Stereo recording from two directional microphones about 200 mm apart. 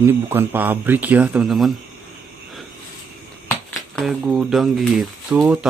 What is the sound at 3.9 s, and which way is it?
Speech, centre (ahead or behind).